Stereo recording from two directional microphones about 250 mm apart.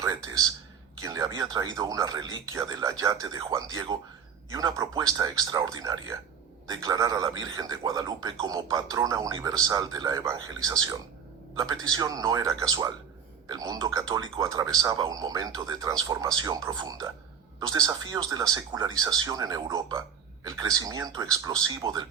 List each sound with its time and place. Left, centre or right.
1.0 s a man's voice: centre